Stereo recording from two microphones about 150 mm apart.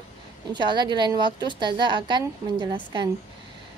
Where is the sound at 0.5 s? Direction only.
30° right (ahead or behind).